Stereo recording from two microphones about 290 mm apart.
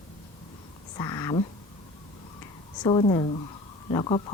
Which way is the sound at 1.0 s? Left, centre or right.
Centre.